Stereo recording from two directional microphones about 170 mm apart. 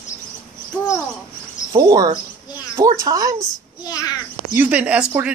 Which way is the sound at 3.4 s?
25° left (ahead or behind).